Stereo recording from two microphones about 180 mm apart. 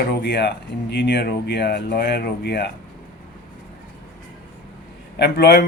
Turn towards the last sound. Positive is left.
turn(degrees=70)  # may be behind; listen again after turning